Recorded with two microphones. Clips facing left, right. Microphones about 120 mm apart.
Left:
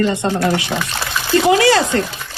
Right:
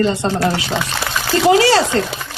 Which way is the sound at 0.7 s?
70° right (ahead or behind).